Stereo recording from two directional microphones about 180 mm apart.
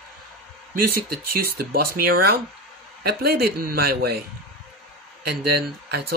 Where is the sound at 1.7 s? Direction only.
55° right (ahead or behind).